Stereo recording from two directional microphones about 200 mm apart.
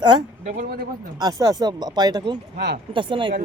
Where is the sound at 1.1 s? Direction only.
20° right (ahead or behind).